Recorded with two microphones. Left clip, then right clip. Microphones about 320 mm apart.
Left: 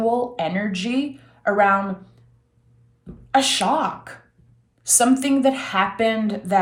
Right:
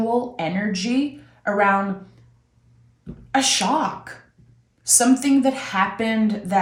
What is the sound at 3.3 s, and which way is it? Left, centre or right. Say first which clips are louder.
Speech: left 1 dB; centre.